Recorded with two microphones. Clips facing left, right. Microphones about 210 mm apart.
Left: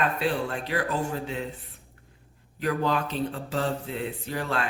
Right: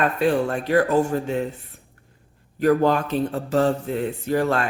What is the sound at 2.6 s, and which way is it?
A man's voice, 50° right (ahead or behind).